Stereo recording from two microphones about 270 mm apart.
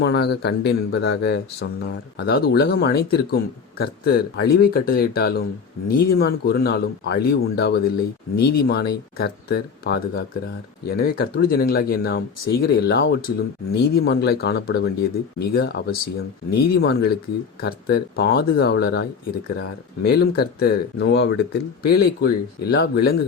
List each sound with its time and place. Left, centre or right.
0.0 s speech: left
20.1 s speech: left